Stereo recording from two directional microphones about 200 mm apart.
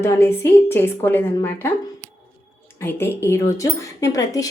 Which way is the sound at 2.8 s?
10° left (ahead or behind).